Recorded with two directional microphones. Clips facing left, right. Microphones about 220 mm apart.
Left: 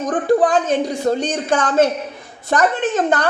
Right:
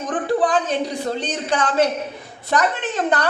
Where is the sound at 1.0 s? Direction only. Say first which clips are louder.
Left 6 dB; 45° left (ahead or behind).